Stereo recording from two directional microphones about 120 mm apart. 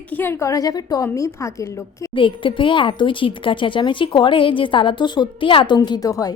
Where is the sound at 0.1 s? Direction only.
20° left (ahead or behind).